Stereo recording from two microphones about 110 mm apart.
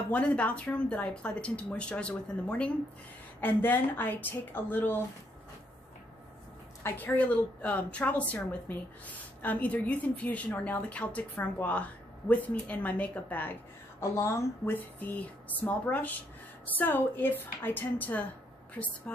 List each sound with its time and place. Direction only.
0.1 s a woman's voice: 10° left (ahead or behind)
6.8 s a woman's voice: 15° left (ahead or behind)